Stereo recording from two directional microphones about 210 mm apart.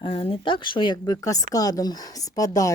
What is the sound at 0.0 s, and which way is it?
Speech, 25° left (ahead or behind).